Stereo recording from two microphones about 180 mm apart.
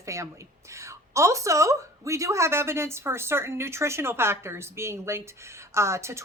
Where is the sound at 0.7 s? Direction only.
15° right (ahead or behind).